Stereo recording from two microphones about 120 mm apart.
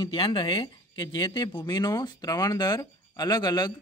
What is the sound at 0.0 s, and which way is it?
Speech, 40° left (ahead or behind).